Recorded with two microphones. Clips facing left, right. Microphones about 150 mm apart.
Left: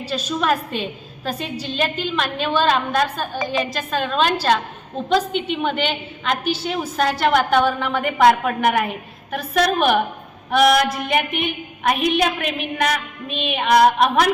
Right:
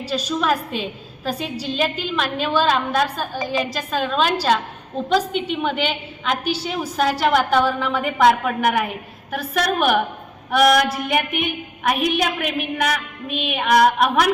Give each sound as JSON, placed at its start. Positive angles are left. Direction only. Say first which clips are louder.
{"t": 0.1, "sound": "a woman's voice", "louder": "even", "side_deg": 0}